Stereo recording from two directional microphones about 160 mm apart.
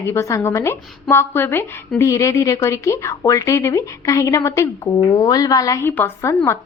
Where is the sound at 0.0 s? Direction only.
15° left (ahead or behind).